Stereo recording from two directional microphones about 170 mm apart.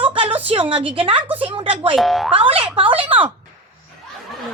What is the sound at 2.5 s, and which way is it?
Speech, 30° right (ahead or behind).